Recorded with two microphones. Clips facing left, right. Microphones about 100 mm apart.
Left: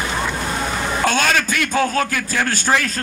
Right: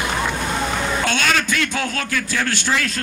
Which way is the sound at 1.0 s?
40° left (ahead or behind).